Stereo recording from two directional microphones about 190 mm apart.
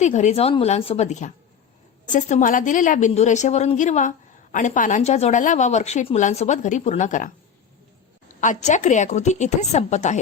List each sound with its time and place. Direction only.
0.0 s a woman's voice: 35° left (ahead or behind)